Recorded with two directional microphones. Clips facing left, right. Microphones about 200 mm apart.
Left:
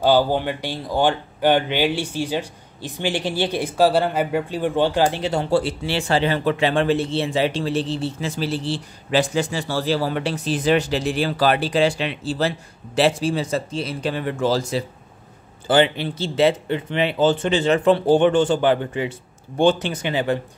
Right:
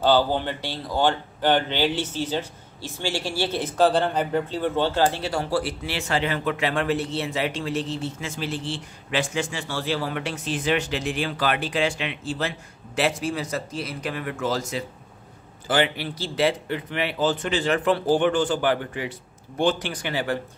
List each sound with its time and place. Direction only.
0.0 s speech: 10° left (ahead or behind)